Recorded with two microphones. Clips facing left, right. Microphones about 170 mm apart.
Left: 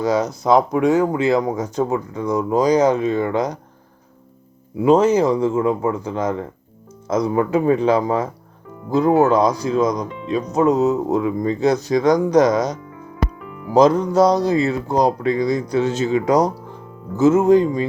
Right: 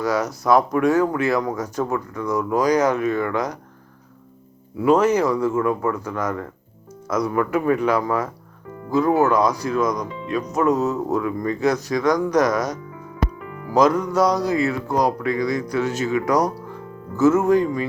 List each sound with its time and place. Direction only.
0.0 s speech: 25° left (ahead or behind)
4.8 s speech: 20° left (ahead or behind)